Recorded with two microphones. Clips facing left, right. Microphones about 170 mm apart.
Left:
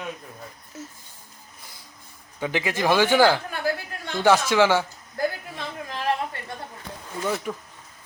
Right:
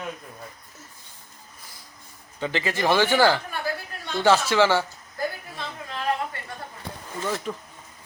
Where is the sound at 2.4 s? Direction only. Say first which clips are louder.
Left 1 dB; 15° left (ahead or behind).